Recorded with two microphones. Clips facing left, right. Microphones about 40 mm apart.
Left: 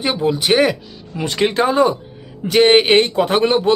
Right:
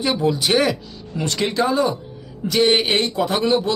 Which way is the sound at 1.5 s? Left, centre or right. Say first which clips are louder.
Left 4 dB; left.